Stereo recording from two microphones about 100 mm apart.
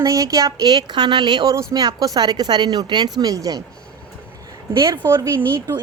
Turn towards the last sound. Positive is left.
turn(degrees=-30)  # may be behind; listen again after turning